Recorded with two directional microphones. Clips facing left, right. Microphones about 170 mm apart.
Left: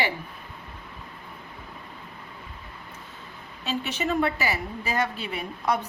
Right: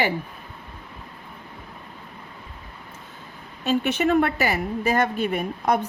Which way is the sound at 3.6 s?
55° right (ahead or behind).